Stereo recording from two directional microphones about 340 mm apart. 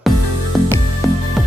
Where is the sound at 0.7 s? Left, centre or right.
Centre.